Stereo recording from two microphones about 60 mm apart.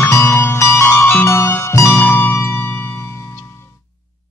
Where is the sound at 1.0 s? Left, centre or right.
Left.